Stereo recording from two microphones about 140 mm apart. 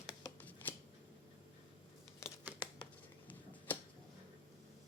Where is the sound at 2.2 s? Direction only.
20° left (ahead or behind).